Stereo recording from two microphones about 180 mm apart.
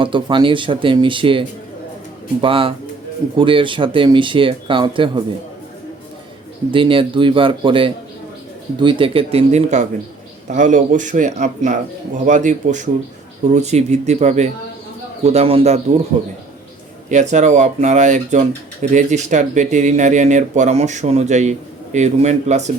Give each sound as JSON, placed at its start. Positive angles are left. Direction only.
{"t": 0.0, "sound": "speech", "side_deg": -25}
{"t": 6.7, "sound": "a man's voice", "side_deg": -30}
{"t": 17.1, "sound": "speech", "side_deg": -40}